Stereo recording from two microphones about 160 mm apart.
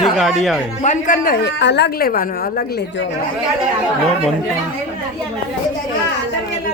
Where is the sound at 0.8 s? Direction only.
50° left (ahead or behind); by 2.8 s 70° left (ahead or behind).